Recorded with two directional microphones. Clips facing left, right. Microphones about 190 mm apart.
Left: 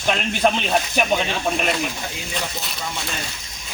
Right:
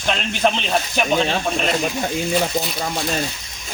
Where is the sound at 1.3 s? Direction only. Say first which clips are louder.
Right 2 dB; 45° right (ahead or behind).